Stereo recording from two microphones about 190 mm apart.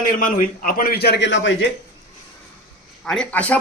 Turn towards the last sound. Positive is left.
turn(degrees=5)  # may be behind; listen again after turning